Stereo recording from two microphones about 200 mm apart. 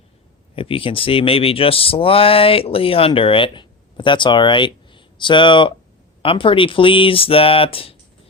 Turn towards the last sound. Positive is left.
turn(degrees=30)  # may be behind; listen again after turning